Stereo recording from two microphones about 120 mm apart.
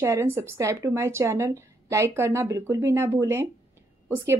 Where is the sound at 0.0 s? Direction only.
20° right (ahead or behind).